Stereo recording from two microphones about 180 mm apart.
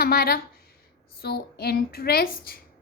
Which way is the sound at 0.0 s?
55° left (ahead or behind).